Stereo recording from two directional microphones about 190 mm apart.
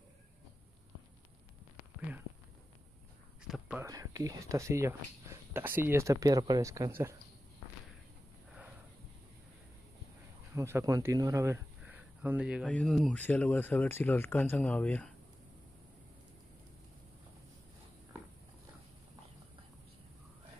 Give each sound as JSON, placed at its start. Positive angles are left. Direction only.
{"t": 3.4, "sound": "a sound", "side_deg": -5}
{"t": 3.8, "sound": "speech", "side_deg": -20}
{"t": 10.5, "sound": "speech", "side_deg": -15}
{"t": 12.6, "sound": "speech", "side_deg": 5}